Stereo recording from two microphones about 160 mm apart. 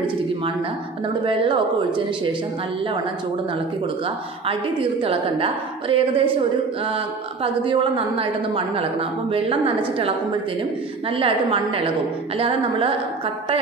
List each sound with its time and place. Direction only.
1.2 s a woman's voice: 30° right (ahead or behind)
4.5 s a woman's voice: 35° right (ahead or behind)
7.4 s a woman's voice: 35° right (ahead or behind)
11.1 s a woman's voice: 35° right (ahead or behind)